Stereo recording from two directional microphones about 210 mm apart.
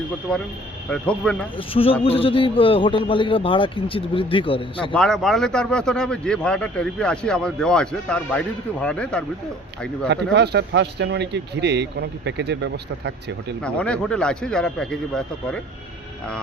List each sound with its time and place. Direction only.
0.3 s a man's voice: 5° left (ahead or behind)
1.5 s a man's voice: 25° left (ahead or behind)
4.9 s a man's voice: centre (ahead or behind)
10.3 s speech: 50° right (ahead or behind)
13.6 s a man's voice: 5° left (ahead or behind)